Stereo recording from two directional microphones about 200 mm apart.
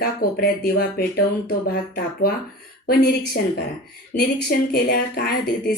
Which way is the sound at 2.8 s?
50° left (ahead or behind).